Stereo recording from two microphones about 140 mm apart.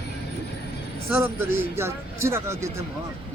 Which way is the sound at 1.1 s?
15° right (ahead or behind).